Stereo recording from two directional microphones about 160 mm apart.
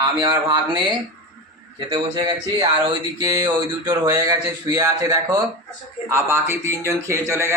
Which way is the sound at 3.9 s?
20° right (ahead or behind).